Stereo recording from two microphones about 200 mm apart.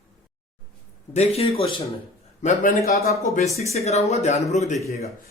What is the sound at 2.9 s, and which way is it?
Speech, 50° left (ahead or behind).